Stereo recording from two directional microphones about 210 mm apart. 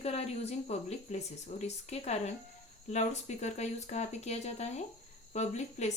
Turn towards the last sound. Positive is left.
turn(degrees=35)  # may be behind; listen again after turning